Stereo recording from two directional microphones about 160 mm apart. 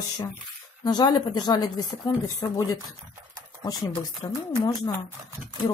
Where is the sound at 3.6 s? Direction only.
25° left (ahead or behind).